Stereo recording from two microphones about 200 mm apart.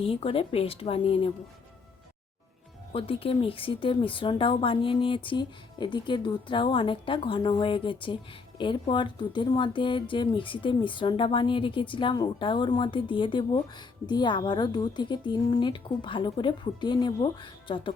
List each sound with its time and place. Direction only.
0.0 s a woman's voice: 30° left (ahead or behind)
2.9 s a woman's voice: 30° left (ahead or behind)